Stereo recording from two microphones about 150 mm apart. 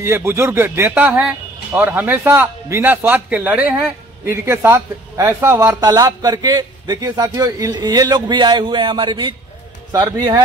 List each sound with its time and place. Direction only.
0.0 s a man's voice: 15° right (ahead or behind)
1.0 s speech: 5° right (ahead or behind)
1.7 s a man's voice: 15° right (ahead or behind)
5.8 s a man's voice: 25° right (ahead or behind)